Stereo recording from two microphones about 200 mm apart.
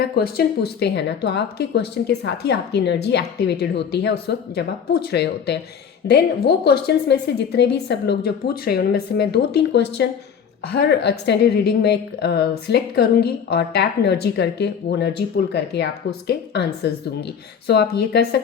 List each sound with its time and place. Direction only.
0.0 s a woman's voice: 50° left (ahead or behind)